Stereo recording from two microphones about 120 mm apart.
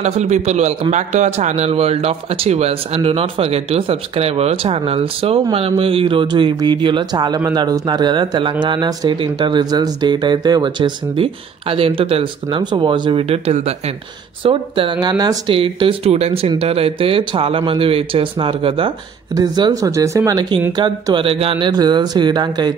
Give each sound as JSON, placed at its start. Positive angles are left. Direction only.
{"t": 0.0, "sound": "a man's voice", "side_deg": -70}
{"t": 13.2, "sound": "a man's voice", "side_deg": -60}
{"t": 14.4, "sound": "speech", "side_deg": -45}
{"t": 15.0, "sound": "speech", "side_deg": -30}
{"t": 15.5, "sound": "speech", "side_deg": -50}
{"t": 19.3, "sound": "speech", "side_deg": -35}
{"t": 20.7, "sound": "speech", "side_deg": -40}